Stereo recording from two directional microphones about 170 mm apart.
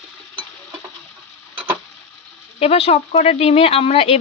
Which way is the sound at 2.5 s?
35° left (ahead or behind).